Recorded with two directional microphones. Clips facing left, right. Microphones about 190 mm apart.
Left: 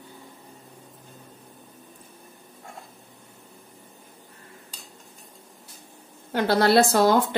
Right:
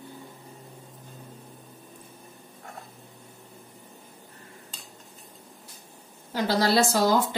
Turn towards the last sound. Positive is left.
turn(degrees=60)  # may be behind; listen again after turning